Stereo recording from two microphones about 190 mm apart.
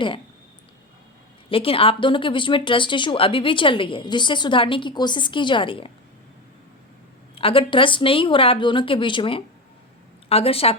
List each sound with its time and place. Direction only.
1.5 s speech: 30° left (ahead or behind)
7.3 s a woman's voice: 30° left (ahead or behind)